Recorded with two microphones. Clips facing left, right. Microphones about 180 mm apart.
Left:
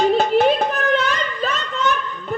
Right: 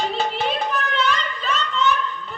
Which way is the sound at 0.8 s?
45° left (ahead or behind).